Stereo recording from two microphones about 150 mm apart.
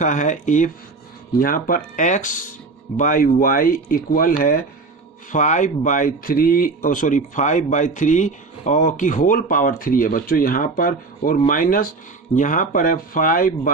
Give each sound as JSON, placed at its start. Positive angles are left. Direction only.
{"t": 0.0, "sound": "speech", "side_deg": 55}
{"t": 1.4, "sound": "speech", "side_deg": 70}
{"t": 5.3, "sound": "speech", "side_deg": 55}